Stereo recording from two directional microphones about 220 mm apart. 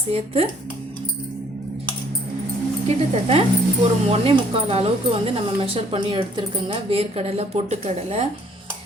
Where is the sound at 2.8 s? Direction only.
30° right (ahead or behind).